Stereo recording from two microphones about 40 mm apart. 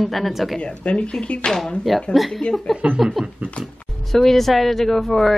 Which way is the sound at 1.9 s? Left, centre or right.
Centre.